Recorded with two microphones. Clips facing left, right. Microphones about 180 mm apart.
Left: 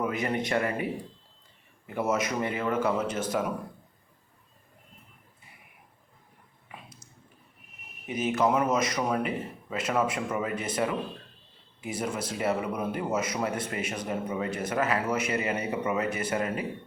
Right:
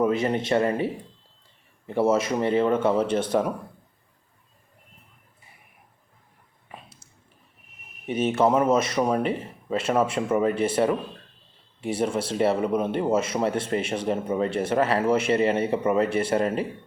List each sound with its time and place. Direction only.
0.2 s speech: 25° right (ahead or behind)
2.0 s speech: 30° right (ahead or behind)
8.0 s speech: 30° right (ahead or behind)